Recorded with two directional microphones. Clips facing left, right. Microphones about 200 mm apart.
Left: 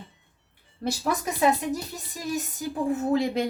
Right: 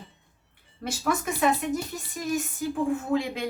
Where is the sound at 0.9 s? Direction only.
35° left (ahead or behind).